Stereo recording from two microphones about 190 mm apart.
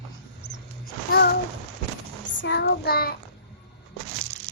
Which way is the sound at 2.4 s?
65° left (ahead or behind).